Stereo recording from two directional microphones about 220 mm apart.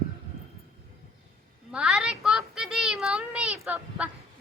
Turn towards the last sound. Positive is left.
turn(degrees=-5)  # may be behind; listen again after turning